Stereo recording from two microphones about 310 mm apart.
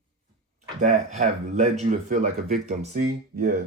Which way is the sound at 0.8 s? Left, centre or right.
Right.